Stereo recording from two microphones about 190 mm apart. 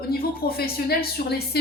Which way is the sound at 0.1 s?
55° left (ahead or behind).